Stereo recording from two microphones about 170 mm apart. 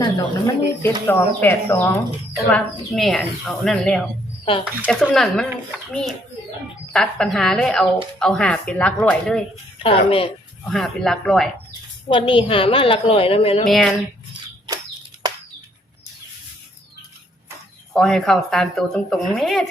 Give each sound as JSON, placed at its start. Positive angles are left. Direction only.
{"t": 0.0, "sound": "speech", "side_deg": 20}
{"t": 2.5, "sound": "a woman's voice", "side_deg": 5}
{"t": 9.7, "sound": "a woman's voice", "side_deg": 35}
{"t": 10.6, "sound": "a woman's voice", "side_deg": 0}
{"t": 12.0, "sound": "a woman's voice", "side_deg": 30}
{"t": 13.7, "sound": "a woman's voice", "side_deg": 0}
{"t": 17.9, "sound": "a woman's voice", "side_deg": 0}